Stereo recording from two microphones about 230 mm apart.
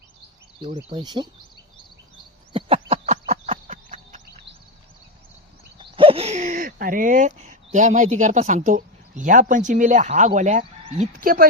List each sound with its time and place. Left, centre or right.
0.6 s speech: right
2.5 s a sound: right
5.8 s speech: right
11.1 s speech: right